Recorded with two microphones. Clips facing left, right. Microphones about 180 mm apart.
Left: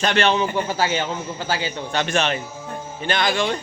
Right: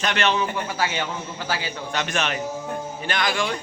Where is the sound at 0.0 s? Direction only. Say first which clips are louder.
Left 4 dB; 30° left (ahead or behind).